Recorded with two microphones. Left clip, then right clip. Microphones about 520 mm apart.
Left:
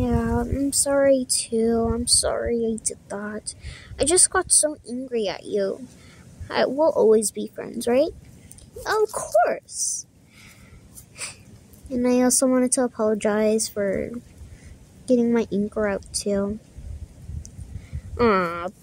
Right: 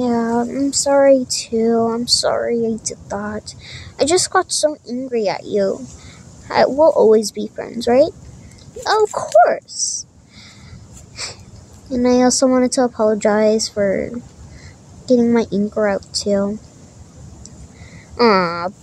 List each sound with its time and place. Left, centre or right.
0.0 s female singing: left
8.8 s speech: left
11.9 s female singing: left
18.1 s speech: left